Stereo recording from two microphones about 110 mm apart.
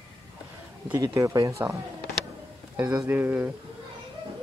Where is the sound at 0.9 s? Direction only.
30° right (ahead or behind).